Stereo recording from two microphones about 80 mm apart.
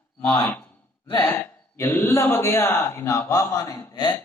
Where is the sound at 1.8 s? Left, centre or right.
Left.